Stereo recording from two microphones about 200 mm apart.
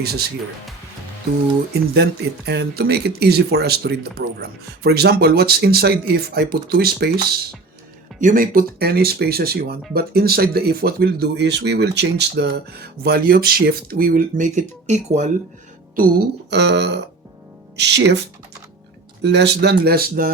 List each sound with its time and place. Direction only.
0.0 s speech: 50° right (ahead or behind)
2.5 s speech: 55° right (ahead or behind); by 15.3 s 35° right (ahead or behind)
16.0 s speech: 55° right (ahead or behind)
19.2 s speech: 55° right (ahead or behind)